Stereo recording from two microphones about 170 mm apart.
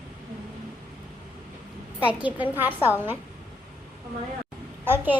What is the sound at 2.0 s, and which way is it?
A woman's voice, 10° right (ahead or behind).